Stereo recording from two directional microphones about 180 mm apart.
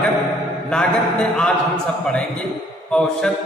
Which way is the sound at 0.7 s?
5° left (ahead or behind).